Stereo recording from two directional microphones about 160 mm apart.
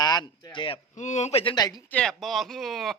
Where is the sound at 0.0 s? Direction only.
25° left (ahead or behind).